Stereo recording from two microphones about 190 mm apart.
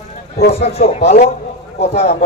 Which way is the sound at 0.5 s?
30° left (ahead or behind).